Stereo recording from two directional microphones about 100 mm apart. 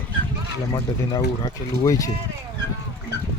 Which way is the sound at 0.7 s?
40° left (ahead or behind).